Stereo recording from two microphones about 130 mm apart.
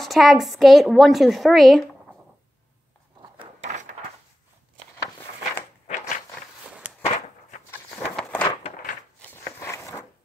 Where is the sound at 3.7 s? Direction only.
65° right (ahead or behind).